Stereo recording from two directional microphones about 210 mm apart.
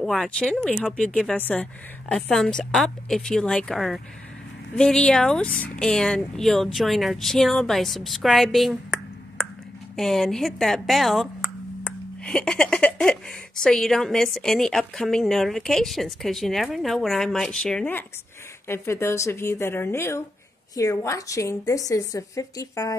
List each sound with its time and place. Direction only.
0.0 s a woman's voice: centre (ahead or behind)